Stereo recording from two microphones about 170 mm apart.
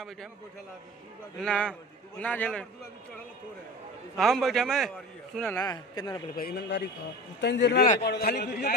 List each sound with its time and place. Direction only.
1.4 s a man's voice: 5° left (ahead or behind)
4.2 s a man's voice: centre (ahead or behind)
5.6 s a man's voice: 25° left (ahead or behind)
6.3 s a man's voice: 70° left (ahead or behind)
7.3 s a man's voice: 90° left
8.0 s a man's voice: 70° left (ahead or behind)